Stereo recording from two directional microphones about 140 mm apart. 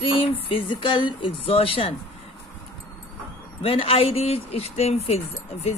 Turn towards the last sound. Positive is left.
turn(degrees=50)  # may be behind; listen again after turning